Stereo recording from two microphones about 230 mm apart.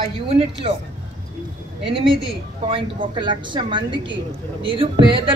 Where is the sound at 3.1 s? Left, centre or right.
Centre.